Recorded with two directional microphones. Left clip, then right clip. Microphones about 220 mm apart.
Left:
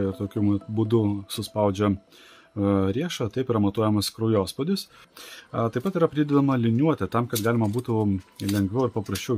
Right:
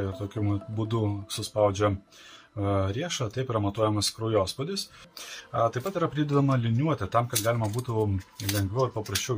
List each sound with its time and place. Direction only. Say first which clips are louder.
0.0 s speech: left 6 dB; 45° left (ahead or behind)